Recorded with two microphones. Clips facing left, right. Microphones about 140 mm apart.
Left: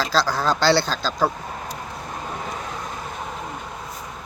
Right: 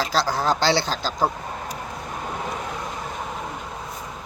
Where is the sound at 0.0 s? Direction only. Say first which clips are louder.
Left 1 dB; 20° right (ahead or behind).